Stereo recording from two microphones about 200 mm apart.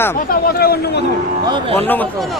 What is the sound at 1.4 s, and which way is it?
Speech, 25° right (ahead or behind).